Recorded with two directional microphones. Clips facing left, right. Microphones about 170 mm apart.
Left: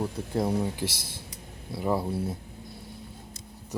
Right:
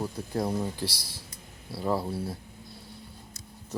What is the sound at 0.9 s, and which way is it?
Speech, 50° left (ahead or behind).